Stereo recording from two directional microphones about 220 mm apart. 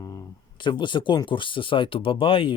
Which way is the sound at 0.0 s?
15° left (ahead or behind).